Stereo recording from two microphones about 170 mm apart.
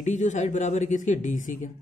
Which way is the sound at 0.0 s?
45° left (ahead or behind).